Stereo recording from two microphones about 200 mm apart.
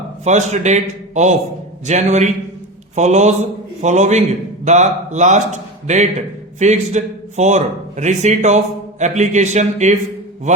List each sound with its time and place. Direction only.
0.3 s speech: 35° right (ahead or behind)